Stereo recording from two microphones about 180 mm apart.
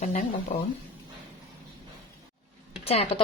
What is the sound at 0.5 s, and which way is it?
Speech, 45° left (ahead or behind).